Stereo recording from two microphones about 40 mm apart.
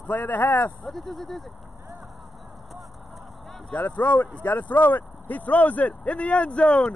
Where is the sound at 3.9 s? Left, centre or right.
Left.